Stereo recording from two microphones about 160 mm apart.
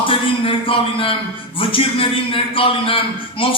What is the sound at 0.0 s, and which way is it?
A man's voice, 35° left (ahead or behind).